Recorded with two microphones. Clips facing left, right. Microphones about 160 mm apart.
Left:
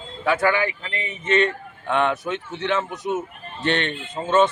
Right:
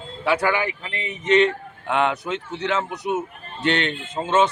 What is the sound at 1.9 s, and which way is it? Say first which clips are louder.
Speech: even; 10° right (ahead or behind).